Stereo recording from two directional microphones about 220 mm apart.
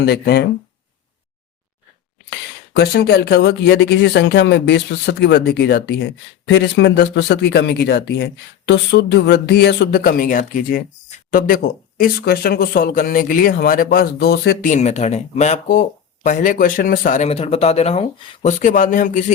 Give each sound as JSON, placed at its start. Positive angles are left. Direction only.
{"t": 0.0, "sound": "speech", "side_deg": 50}
{"t": 2.3, "sound": "speech", "side_deg": 45}